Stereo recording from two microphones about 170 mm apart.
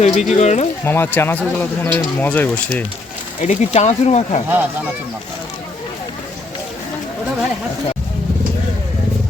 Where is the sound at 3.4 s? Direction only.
40° left (ahead or behind).